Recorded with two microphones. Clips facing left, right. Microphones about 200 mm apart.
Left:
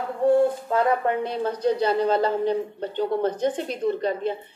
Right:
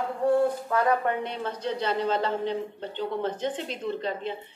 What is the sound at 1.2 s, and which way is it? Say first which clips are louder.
A woman's voice: left 7 dB; 35° left (ahead or behind).